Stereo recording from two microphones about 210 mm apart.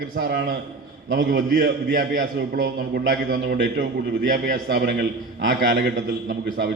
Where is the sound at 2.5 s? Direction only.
45° right (ahead or behind).